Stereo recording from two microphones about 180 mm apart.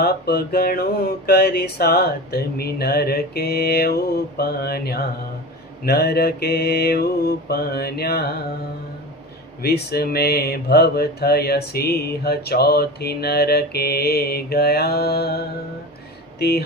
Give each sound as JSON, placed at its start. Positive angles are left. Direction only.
{"t": 0.0, "sound": "mantra", "side_deg": 60}
{"t": 9.6, "sound": "mantra", "side_deg": 60}